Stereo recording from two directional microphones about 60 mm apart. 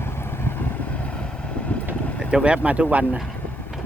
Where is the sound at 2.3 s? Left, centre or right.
Centre.